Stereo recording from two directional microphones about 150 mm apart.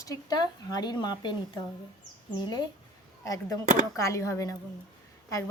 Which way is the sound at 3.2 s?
25° left (ahead or behind).